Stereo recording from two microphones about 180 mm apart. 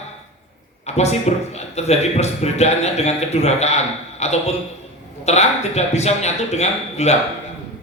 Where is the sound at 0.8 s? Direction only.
35° left (ahead or behind).